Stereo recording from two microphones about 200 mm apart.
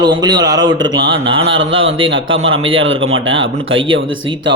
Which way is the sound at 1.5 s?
75° right (ahead or behind).